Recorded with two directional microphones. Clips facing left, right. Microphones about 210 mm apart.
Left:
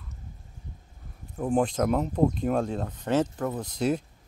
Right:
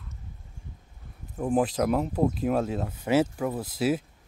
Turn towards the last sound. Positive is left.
turn(degrees=-5)  # may be behind; listen again after turning